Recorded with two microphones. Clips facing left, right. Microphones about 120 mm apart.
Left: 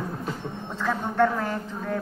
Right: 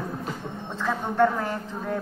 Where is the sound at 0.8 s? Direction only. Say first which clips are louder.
Right 1 dB; 10° right (ahead or behind).